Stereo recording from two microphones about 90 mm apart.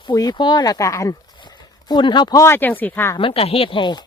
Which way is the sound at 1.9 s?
60° left (ahead or behind).